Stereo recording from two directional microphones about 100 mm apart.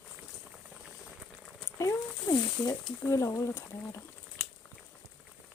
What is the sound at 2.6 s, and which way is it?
Speech, 35° left (ahead or behind).